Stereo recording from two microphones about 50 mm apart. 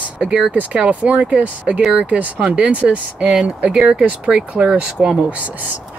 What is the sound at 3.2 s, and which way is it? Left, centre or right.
Speech, centre.